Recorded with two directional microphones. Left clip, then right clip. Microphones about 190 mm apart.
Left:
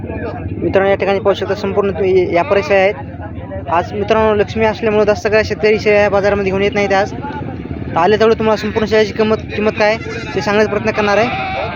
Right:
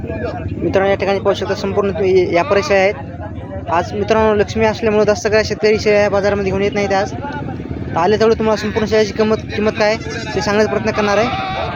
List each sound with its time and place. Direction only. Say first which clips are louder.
0.7 s speech: left 2 dB; 5° left (ahead or behind)
11.3 s sheep: left 1 dB; 30° right (ahead or behind)